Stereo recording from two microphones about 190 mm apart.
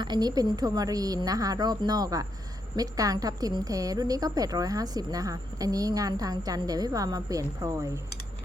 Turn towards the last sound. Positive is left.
turn(degrees=-15)  # may be behind; listen again after turning